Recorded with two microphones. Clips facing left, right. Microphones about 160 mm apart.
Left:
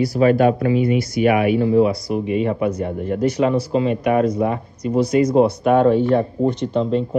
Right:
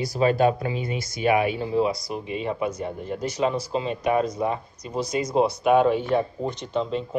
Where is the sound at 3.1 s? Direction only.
60° left (ahead or behind).